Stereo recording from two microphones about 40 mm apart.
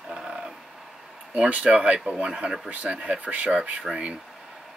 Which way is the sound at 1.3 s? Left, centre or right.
Right.